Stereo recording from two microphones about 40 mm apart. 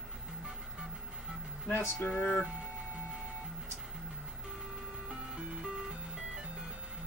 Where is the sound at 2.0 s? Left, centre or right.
Left.